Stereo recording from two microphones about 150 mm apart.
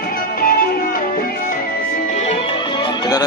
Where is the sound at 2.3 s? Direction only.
35° left (ahead or behind).